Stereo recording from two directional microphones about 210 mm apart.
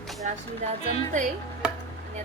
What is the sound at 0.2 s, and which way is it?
Child singing, 35° right (ahead or behind).